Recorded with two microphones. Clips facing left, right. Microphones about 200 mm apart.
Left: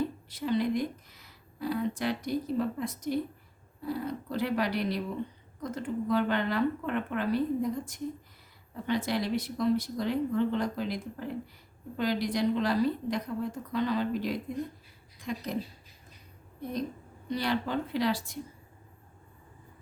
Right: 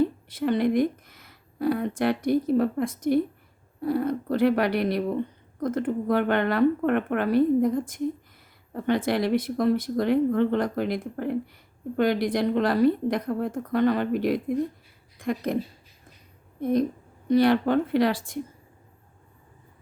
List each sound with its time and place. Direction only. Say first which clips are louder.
0.3 s speech: right 6 dB; 55° right (ahead or behind)
16.6 s a woman's voice: right 11 dB; 55° right (ahead or behind)